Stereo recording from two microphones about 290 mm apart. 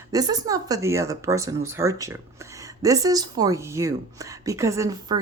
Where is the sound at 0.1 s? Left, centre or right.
Centre.